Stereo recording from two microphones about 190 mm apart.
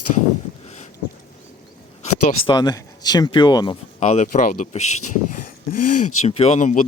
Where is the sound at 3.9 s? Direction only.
40° left (ahead or behind).